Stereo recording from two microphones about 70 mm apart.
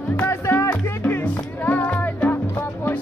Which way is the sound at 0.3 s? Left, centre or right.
Left.